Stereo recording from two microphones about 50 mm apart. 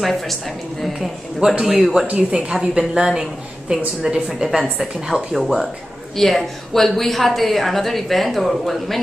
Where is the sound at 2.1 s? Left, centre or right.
Right.